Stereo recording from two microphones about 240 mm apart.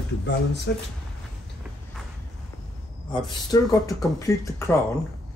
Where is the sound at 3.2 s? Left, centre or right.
Centre.